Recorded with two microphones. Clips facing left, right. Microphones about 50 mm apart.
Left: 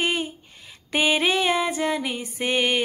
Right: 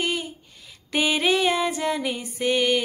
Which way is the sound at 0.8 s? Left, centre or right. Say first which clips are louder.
Left 1 dB; centre.